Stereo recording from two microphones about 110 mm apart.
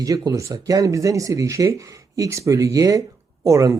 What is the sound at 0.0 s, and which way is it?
Speech, 30° right (ahead or behind).